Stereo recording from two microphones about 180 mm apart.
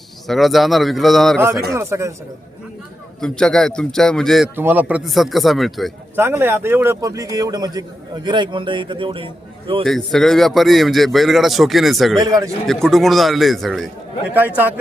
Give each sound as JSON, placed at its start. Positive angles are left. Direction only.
{"t": 0.3, "sound": "a man's voice", "side_deg": 0}
{"t": 1.7, "sound": "a man's voice", "side_deg": -15}
{"t": 3.2, "sound": "a man's voice", "side_deg": 5}
{"t": 4.5, "sound": "a man's voice", "side_deg": -10}
{"t": 6.1, "sound": "a man's voice", "side_deg": -15}
{"t": 9.8, "sound": "a man's voice", "side_deg": 0}
{"t": 12.2, "sound": "a man's voice", "side_deg": -20}
{"t": 12.6, "sound": "a man's voice", "side_deg": 0}
{"t": 14.3, "sound": "a man's voice", "side_deg": -10}